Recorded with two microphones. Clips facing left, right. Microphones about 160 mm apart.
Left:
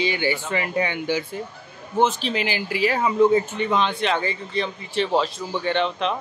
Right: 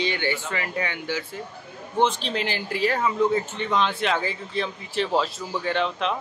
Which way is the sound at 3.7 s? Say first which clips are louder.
Right 1 dB; centre (ahead or behind).